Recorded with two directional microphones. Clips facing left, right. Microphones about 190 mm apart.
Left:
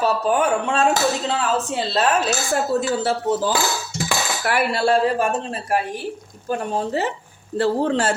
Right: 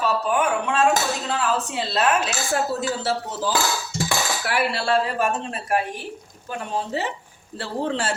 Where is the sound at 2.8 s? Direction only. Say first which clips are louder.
Left 4 dB; 55° left (ahead or behind).